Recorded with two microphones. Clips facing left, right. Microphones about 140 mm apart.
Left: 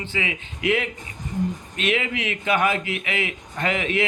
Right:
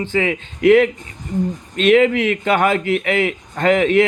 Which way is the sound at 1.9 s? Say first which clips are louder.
Right 12 dB; 55° right (ahead or behind).